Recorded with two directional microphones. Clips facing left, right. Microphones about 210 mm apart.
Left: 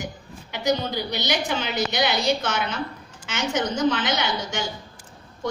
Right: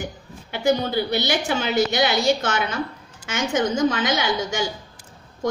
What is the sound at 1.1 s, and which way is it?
A woman's voice, 50° right (ahead or behind).